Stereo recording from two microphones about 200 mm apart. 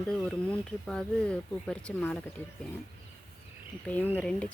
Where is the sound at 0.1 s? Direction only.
5° left (ahead or behind).